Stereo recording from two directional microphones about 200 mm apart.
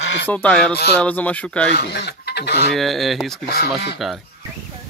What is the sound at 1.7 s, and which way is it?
Speech, 55° left (ahead or behind).